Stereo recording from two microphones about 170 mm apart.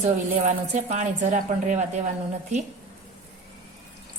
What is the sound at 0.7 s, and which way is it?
Speech, 45° right (ahead or behind).